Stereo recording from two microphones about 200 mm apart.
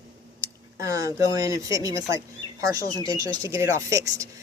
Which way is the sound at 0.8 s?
15° right (ahead or behind).